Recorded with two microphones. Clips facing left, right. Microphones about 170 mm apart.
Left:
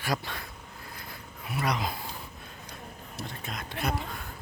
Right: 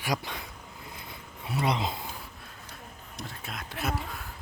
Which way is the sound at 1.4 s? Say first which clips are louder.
Right 2 dB; 25° right (ahead or behind).